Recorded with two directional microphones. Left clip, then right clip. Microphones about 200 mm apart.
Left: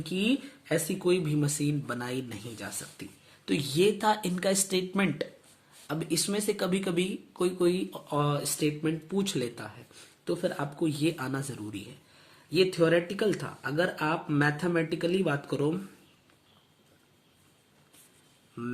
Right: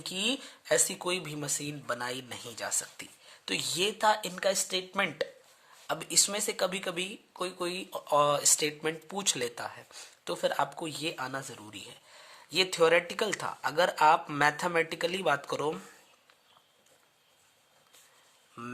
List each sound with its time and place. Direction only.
0.0 s speech: 35° right (ahead or behind)
12.5 s speech: 45° right (ahead or behind)
18.6 s speech: 40° right (ahead or behind)